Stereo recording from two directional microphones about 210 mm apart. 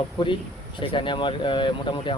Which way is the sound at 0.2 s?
20° left (ahead or behind).